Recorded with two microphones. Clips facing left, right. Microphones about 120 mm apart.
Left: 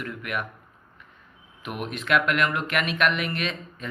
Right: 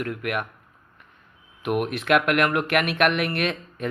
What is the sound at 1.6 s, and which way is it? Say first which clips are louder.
Speech: right 7 dB; 60° right (ahead or behind).